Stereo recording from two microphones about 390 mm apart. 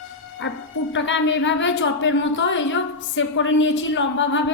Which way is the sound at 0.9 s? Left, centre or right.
Left.